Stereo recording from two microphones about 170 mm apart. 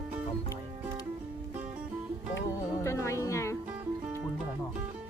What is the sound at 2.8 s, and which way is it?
Music, 15° left (ahead or behind).